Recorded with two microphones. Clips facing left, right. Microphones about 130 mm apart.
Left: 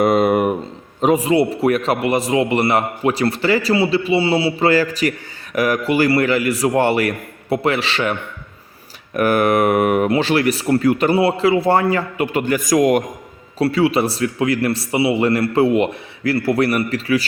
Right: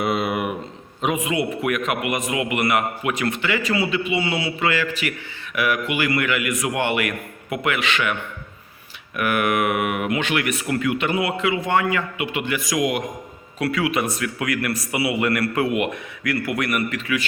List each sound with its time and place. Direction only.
0.0 s a sound: 45° left (ahead or behind)
1.0 s a man's voice: 35° left (ahead or behind)
9.1 s a man's voice: 35° left (ahead or behind)
13.6 s a man's voice: 30° left (ahead or behind)